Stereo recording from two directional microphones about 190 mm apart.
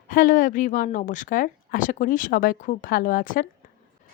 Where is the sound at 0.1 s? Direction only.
45° left (ahead or behind).